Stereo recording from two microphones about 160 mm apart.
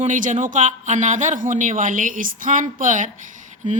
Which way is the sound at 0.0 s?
50° right (ahead or behind).